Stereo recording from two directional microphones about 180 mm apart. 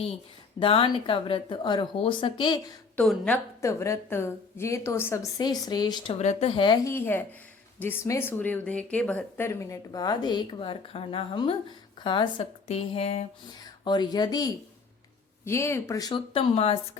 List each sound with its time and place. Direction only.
0.6 s speech: 30° left (ahead or behind)
2.9 s speech: 5° left (ahead or behind); by 6.1 s 25° left (ahead or behind)
6.1 s speech: 35° left (ahead or behind)
13.8 s speech: 25° left (ahead or behind)